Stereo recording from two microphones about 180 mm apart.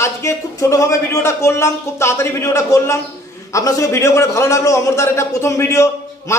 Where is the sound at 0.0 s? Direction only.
15° left (ahead or behind).